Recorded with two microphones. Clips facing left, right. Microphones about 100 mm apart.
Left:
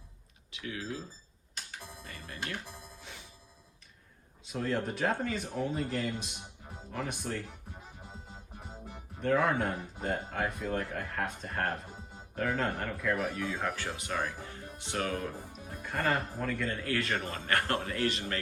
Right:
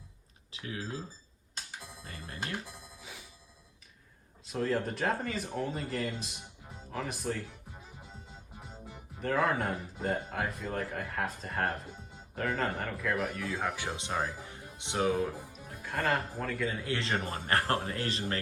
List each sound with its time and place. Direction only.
0.5 s speech: 35° right (ahead or behind)
2.0 s music: 35° right (ahead or behind)
3.0 s music: centre (ahead or behind)
4.4 s speech: centre (ahead or behind)
8.9 s speech: centre (ahead or behind)
13.7 s speech: 20° right (ahead or behind); by 16.8 s 5° right (ahead or behind)
16.8 s speech: 25° right (ahead or behind)